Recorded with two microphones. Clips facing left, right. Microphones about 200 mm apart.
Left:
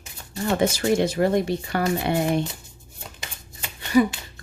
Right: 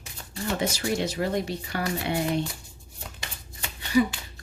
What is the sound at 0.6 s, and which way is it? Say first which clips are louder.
Speech: left 7 dB; 50° left (ahead or behind).